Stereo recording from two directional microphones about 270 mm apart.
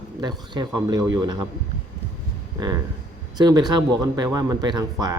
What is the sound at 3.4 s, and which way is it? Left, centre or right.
Speech, centre.